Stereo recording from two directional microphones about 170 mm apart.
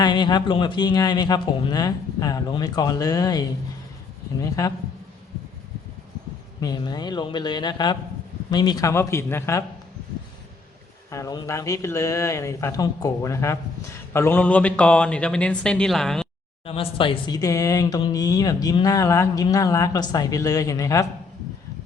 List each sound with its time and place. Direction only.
0.0 s speech: 25° left (ahead or behind)
6.6 s a man's voice: 25° left (ahead or behind)
11.1 s a man's voice: 20° left (ahead or behind); by 16.2 s 5° left (ahead or behind)
16.6 s speech: 35° left (ahead or behind)